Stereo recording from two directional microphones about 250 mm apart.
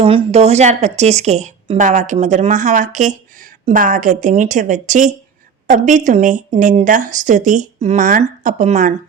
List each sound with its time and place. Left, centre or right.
0.0 s a woman's voice: right